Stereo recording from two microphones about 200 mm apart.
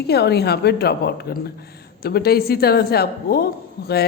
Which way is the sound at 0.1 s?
55° left (ahead or behind).